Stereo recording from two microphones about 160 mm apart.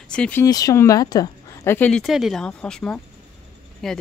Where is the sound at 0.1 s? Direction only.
10° left (ahead or behind).